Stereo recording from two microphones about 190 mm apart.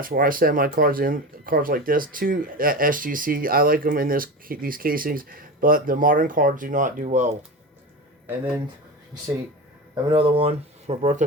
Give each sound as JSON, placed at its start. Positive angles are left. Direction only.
{"t": 0.0, "sound": "speech", "side_deg": -50}
{"t": 9.9, "sound": "speech", "side_deg": -25}